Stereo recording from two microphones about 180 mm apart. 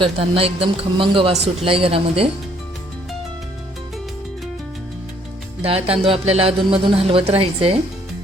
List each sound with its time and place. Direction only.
0.0 s a man's voice: 30° right (ahead or behind)
5.6 s a man's voice: 35° right (ahead or behind)